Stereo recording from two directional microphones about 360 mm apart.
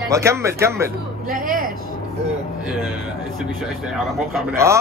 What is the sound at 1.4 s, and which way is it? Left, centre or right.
Speech, right.